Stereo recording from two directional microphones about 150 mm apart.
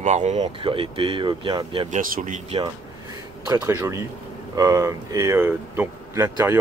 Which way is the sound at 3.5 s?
20° right (ahead or behind).